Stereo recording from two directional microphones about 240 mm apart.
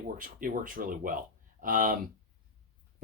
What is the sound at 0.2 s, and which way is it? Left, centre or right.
Speech, right.